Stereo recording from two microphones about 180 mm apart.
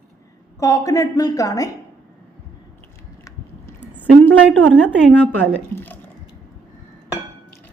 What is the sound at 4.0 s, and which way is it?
Speech, 10° left (ahead or behind).